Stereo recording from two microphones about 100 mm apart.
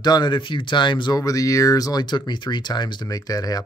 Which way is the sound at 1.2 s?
35° left (ahead or behind).